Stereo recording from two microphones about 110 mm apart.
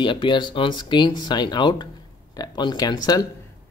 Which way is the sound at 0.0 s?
45° left (ahead or behind).